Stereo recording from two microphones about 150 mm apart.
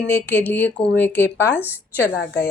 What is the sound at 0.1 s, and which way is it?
Speech, 15° left (ahead or behind).